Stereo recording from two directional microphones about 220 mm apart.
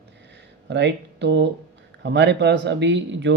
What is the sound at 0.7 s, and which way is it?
Speech, 50° right (ahead or behind).